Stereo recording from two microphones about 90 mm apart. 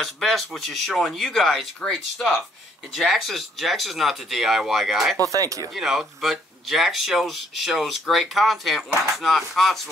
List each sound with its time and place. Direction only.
0.0 s speech: centre (ahead or behind)
5.3 s speech: 40° right (ahead or behind)
5.7 s speech: 5° right (ahead or behind)